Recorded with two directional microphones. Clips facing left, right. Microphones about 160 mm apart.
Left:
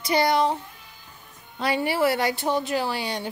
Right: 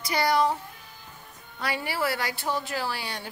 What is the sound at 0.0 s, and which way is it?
Speech, 25° left (ahead or behind).